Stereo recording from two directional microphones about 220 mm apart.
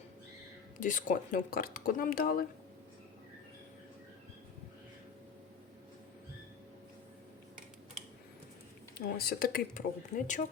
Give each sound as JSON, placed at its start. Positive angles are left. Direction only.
{"t": 0.8, "sound": "speech", "side_deg": 35}
{"t": 9.0, "sound": "speech", "side_deg": 45}